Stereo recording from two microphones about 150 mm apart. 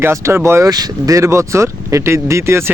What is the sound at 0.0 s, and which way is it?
Speech, 15° right (ahead or behind).